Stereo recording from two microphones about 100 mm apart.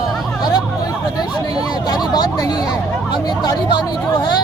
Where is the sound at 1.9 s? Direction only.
45° left (ahead or behind).